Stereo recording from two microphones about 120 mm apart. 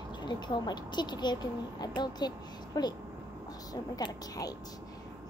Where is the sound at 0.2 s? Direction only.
40° left (ahead or behind).